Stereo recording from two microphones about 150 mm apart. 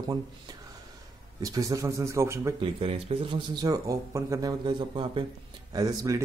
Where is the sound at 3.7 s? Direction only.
20° right (ahead or behind).